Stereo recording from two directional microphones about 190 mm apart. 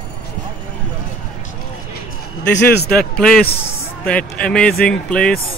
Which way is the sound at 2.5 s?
60° left (ahead or behind).